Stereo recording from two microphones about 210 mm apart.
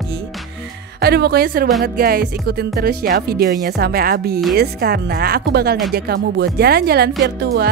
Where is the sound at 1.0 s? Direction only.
50° right (ahead or behind).